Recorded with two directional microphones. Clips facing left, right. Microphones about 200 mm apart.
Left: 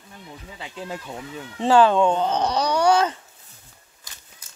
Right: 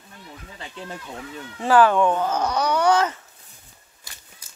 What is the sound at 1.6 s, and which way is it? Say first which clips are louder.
Speech: left 1 dB; 20° left (ahead or behind).